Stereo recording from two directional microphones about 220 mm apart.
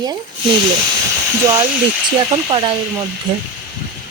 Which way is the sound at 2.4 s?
20° right (ahead or behind).